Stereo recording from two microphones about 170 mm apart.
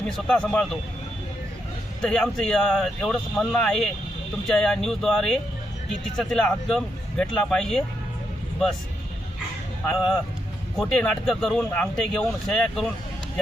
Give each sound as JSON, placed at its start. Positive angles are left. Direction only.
{"t": 0.3, "sound": "speech", "side_deg": 0}
{"t": 2.0, "sound": "a man's voice", "side_deg": 0}
{"t": 9.8, "sound": "speech", "side_deg": 5}